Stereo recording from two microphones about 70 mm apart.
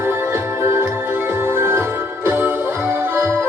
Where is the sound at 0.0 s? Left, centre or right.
Right.